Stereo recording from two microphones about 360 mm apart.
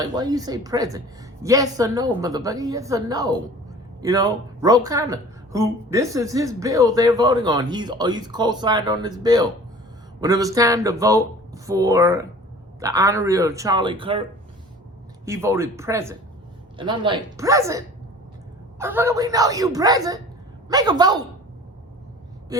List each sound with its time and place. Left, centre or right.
0.0 s a woman's voice: centre